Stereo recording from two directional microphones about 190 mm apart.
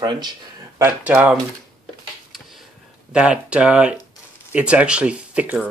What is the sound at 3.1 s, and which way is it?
Speech, 5° right (ahead or behind).